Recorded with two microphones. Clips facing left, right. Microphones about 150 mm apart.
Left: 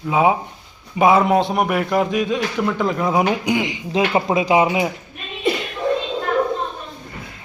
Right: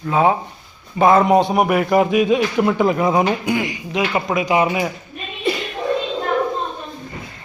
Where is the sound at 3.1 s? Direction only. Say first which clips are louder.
Right 1 dB; 10° left (ahead or behind).